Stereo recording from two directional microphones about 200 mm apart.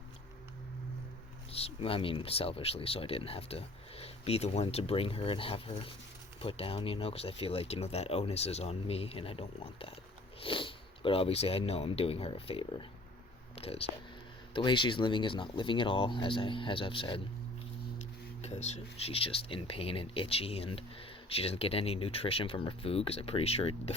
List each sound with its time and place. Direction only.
1.5 s speech: 30° left (ahead or behind)
18.4 s speech: 35° left (ahead or behind)